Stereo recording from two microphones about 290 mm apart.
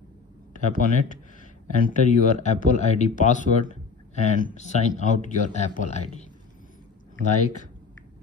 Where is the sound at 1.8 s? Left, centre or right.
Left.